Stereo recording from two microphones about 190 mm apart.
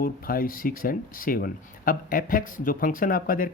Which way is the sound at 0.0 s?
50° left (ahead or behind).